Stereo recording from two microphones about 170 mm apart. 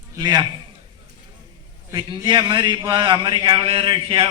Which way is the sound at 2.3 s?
25° right (ahead or behind).